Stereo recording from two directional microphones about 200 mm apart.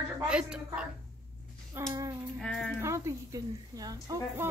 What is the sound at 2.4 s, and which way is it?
Speech, 5° left (ahead or behind).